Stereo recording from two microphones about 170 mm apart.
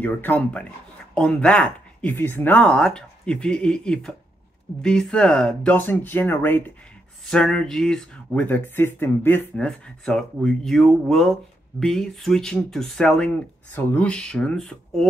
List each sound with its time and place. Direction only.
0.0 s speech: 10° left (ahead or behind)